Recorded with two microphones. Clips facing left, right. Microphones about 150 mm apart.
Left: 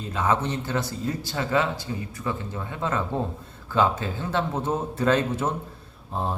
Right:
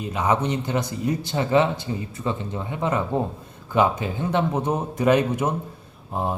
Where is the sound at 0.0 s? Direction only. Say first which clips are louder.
Right 2 dB; 15° right (ahead or behind).